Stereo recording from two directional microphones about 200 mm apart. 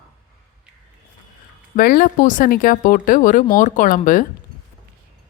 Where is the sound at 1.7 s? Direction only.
45° left (ahead or behind).